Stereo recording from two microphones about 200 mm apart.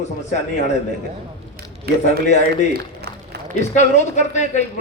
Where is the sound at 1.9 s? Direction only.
50° right (ahead or behind).